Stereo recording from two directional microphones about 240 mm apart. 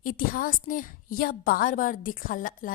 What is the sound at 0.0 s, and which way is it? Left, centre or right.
A woman's voice, left.